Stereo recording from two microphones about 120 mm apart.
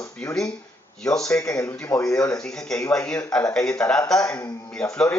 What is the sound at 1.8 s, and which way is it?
Speech, 20° left (ahead or behind).